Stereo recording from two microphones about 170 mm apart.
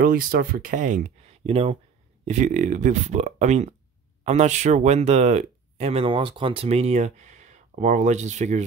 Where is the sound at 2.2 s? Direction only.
45° right (ahead or behind).